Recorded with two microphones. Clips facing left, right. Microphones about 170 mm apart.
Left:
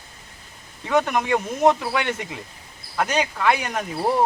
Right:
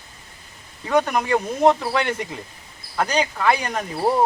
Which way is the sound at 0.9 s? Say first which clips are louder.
Right 1 dB; centre (ahead or behind).